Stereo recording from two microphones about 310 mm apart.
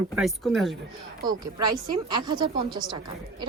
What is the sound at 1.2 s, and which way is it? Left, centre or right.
Speech, centre.